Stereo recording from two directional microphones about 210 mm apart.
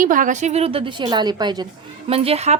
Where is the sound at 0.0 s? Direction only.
40° right (ahead or behind).